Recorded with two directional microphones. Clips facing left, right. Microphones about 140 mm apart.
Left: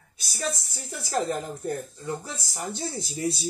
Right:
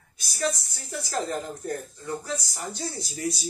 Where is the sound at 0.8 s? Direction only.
30° left (ahead or behind).